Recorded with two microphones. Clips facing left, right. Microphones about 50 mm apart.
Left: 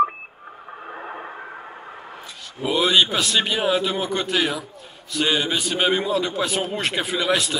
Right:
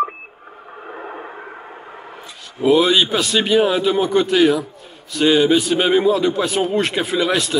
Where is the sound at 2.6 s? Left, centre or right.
Centre.